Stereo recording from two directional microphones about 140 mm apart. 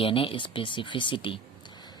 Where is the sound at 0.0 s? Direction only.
40° left (ahead or behind).